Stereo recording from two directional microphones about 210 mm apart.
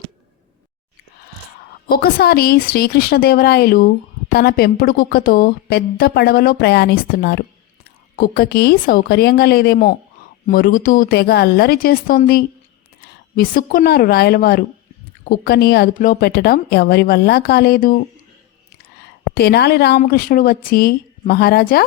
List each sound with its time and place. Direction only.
1.9 s a woman's voice: 45° left (ahead or behind)
19.3 s a woman's voice: 50° left (ahead or behind)